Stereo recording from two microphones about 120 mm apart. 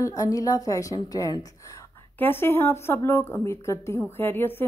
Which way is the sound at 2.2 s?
20° left (ahead or behind).